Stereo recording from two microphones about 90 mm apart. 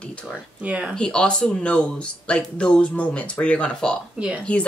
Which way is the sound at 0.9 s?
10° left (ahead or behind).